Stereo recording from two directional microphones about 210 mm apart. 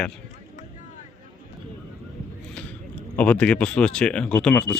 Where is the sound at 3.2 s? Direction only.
5° left (ahead or behind).